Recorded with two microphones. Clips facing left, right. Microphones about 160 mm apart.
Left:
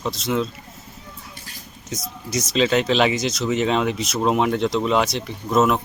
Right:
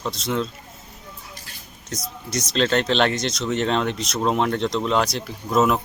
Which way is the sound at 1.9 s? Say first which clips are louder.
Left 2 dB; centre (ahead or behind).